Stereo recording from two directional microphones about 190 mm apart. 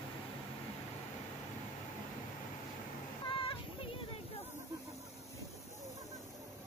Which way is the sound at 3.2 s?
30° left (ahead or behind).